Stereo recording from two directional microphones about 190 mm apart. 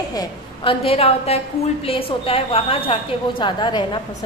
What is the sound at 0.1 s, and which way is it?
Speech, 20° left (ahead or behind).